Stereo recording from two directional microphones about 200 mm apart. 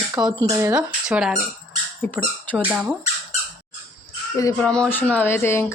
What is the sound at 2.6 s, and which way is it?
Speech, 5° right (ahead or behind).